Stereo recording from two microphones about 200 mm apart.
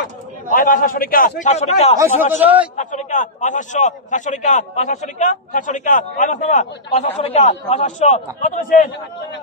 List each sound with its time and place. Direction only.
0.5 s a man's voice: 40° left (ahead or behind)
2.4 s a man's voice: 10° right (ahead or behind)
2.7 s a man's voice: 40° left (ahead or behind)